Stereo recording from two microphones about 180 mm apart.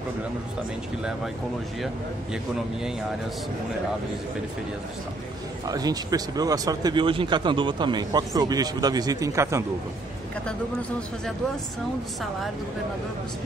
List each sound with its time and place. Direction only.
5.7 s speech: 20° right (ahead or behind)